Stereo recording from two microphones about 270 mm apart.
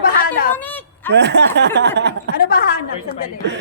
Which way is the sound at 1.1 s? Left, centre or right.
Right.